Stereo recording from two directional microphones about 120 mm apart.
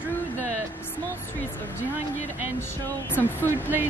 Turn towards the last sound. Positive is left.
turn(degrees=15)  # may be behind; listen again after turning